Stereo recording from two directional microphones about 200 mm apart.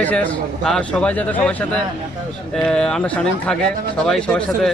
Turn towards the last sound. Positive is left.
turn(degrees=5)  # may be behind; listen again after turning